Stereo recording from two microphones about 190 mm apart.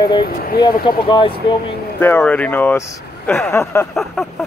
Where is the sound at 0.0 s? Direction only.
25° left (ahead or behind).